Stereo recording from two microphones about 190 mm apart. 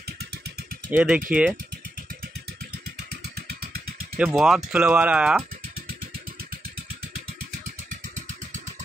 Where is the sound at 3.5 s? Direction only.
50° right (ahead or behind).